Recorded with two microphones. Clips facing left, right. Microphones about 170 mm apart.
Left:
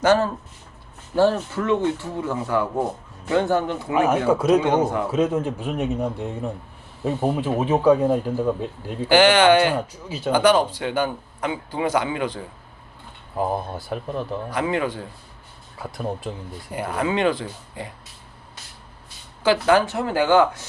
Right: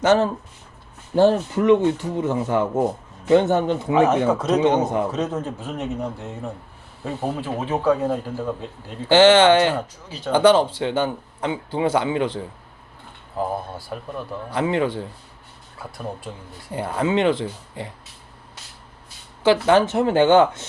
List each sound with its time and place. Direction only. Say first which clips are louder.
0.0 s a man's voice: right 1 dB; 20° right (ahead or behind)
3.9 s a man's voice: right 1 dB; 10° left (ahead or behind)
4.8 s a man's voice: even; 20° right (ahead or behind)
5.1 s a man's voice: left 4 dB; 10° left (ahead or behind)
9.0 s a man's voice: right 2 dB; 25° right (ahead or behind)
10.1 s a man's voice: left 5 dB; 10° left (ahead or behind)
10.3 s a man's voice: right 3 dB; 25° right (ahead or behind)
13.7 s speech: left 3 dB; 25° left (ahead or behind)
14.5 s a man's voice: right 3 dB; 25° right (ahead or behind)
15.8 s speech: left 4 dB; 20° left (ahead or behind)
16.7 s a man's voice: right 2 dB; 25° right (ahead or behind)
19.4 s a man's voice: right 2 dB; 25° right (ahead or behind)